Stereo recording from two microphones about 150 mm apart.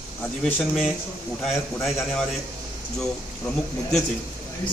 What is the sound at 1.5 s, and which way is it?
Speech, 20° left (ahead or behind).